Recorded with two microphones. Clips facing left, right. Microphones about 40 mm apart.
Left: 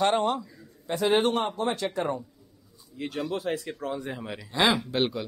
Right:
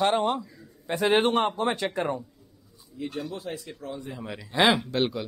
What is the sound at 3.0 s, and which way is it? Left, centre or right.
Speech, left.